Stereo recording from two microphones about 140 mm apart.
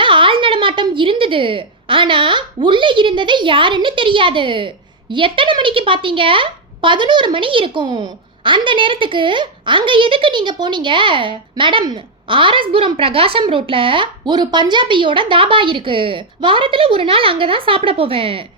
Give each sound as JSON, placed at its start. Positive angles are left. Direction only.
{"t": 0.0, "sound": "a woman's voice", "side_deg": -35}